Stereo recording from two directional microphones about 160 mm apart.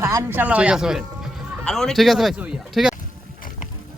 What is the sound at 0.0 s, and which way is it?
Speech, 15° right (ahead or behind).